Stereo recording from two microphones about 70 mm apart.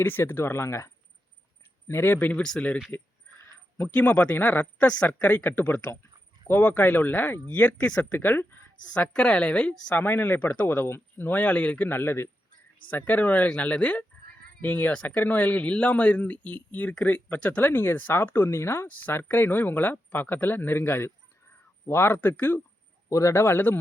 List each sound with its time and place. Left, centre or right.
0.0 s speech: left
2.1 s a woman's voice: centre
3.9 s speech: centre
8.8 s a woman's voice: centre
9.9 s speech: left
11.9 s speech: left
12.9 s speech: left
23.0 s speech: left